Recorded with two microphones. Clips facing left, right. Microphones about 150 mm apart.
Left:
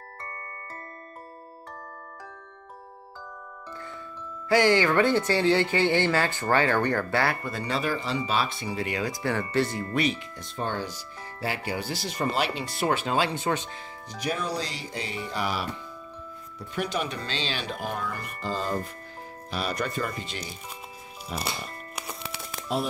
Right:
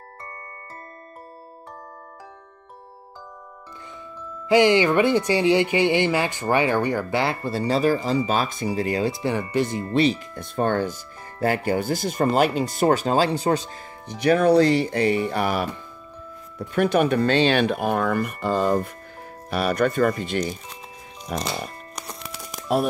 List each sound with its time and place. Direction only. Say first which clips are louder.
4.5 s speech: right 4 dB; 15° right (ahead or behind)
7.4 s speech: right 8 dB; 35° right (ahead or behind)
10.3 s speech: right 9 dB; 55° right (ahead or behind); by 13.7 s 35° right (ahead or behind)
14.0 s speech: right 13 dB; 60° right (ahead or behind)